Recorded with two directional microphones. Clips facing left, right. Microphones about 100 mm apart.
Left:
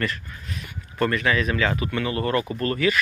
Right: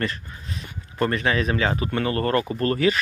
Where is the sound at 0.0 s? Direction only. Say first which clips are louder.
Even; 30° right (ahead or behind).